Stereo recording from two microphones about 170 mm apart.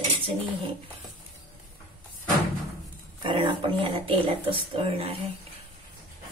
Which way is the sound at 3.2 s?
30° right (ahead or behind).